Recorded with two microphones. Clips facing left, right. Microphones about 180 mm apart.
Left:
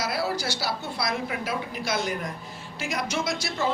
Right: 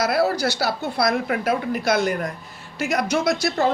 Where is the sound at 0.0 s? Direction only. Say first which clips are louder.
Right 8 dB; 60° right (ahead or behind).